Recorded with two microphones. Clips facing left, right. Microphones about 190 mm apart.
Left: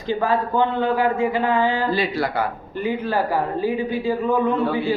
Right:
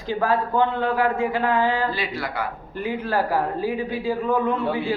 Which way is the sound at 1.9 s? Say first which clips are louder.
Left 6 dB; 35° left (ahead or behind).